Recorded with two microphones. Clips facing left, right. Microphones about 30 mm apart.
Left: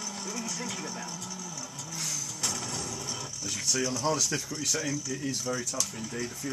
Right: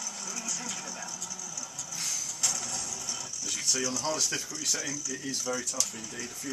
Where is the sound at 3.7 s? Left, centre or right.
Left.